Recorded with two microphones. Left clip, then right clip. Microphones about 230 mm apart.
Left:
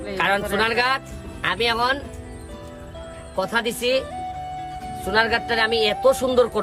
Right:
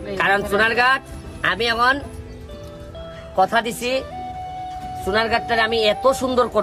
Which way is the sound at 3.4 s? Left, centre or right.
Centre.